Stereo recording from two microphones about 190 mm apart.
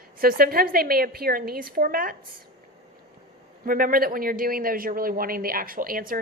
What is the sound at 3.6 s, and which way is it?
A woman's voice, 45° right (ahead or behind).